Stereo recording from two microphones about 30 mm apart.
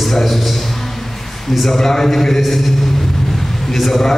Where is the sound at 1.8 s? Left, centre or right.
Centre.